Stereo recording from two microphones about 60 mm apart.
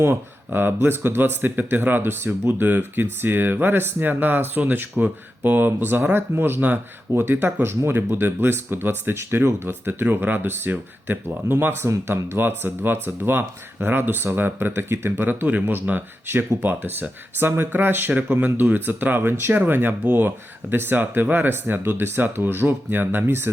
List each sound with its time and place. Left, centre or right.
0.0 s speech: right